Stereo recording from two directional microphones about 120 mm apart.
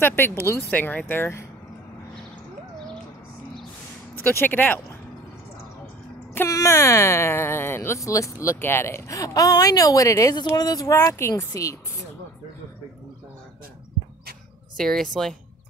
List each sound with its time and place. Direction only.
0.0 s speech: 20° left (ahead or behind)
4.2 s speech: 15° left (ahead or behind)
6.3 s speech: 25° left (ahead or behind)
14.8 s speech: 5° left (ahead or behind)